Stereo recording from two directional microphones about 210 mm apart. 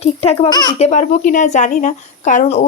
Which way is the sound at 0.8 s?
35° left (ahead or behind).